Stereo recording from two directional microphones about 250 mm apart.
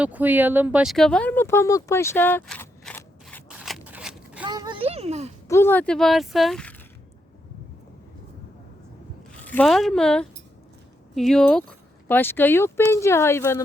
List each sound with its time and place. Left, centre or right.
0.0 s a sound: centre
4.4 s a child's voice: centre
5.5 s speech: centre
9.3 s speech: centre